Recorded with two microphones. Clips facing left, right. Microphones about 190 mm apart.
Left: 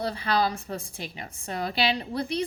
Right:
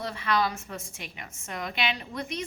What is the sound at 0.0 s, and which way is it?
A woman's voice, 35° left (ahead or behind).